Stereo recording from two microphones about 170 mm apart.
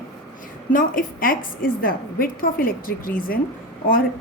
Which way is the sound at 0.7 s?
55° left (ahead or behind).